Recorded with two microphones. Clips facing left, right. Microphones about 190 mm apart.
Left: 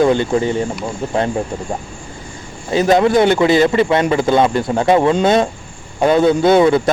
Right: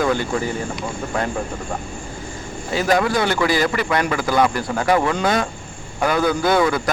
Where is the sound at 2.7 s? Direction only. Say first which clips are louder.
Left 6 dB; 20° left (ahead or behind).